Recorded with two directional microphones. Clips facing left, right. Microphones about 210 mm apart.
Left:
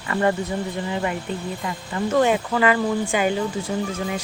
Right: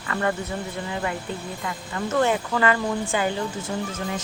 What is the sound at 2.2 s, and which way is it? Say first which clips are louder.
Speech: left 2 dB; 15° left (ahead or behind).